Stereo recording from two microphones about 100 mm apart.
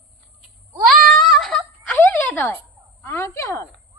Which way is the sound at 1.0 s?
Centre (ahead or behind).